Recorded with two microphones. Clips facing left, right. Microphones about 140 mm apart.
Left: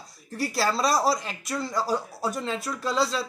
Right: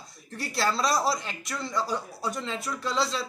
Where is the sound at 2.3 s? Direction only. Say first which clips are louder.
Left 1 dB; 5° left (ahead or behind).